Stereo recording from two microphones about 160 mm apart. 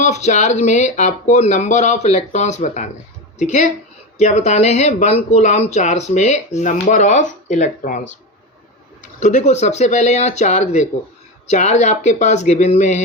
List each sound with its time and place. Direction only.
0.0 s speech: 45° left (ahead or behind)
9.2 s speech: 50° left (ahead or behind)